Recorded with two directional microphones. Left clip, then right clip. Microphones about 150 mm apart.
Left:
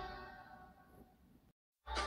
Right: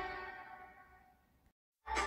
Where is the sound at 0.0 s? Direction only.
25° right (ahead or behind).